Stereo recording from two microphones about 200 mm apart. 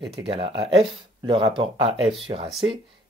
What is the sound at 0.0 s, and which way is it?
Speech, 25° right (ahead or behind).